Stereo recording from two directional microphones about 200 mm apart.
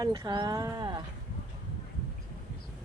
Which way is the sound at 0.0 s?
20° right (ahead or behind).